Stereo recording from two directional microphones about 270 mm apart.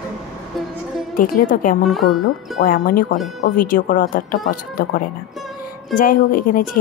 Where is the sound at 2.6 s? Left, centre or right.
Left.